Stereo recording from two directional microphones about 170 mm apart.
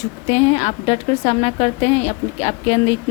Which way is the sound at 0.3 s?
40° left (ahead or behind).